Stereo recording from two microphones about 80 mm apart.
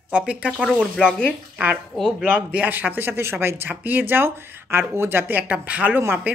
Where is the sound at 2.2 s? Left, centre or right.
Right.